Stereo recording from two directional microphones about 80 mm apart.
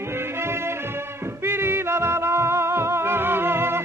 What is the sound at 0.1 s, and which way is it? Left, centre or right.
Music, right.